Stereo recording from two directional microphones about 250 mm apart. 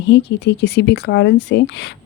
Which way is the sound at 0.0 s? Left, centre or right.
Left.